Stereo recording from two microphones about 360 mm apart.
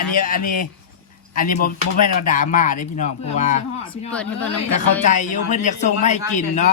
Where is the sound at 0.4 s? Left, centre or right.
Left.